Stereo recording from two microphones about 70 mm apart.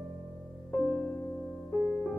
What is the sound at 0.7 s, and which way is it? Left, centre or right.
Music, centre.